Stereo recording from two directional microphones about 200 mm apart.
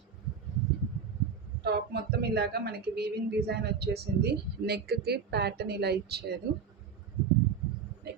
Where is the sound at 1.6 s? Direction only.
55° right (ahead or behind).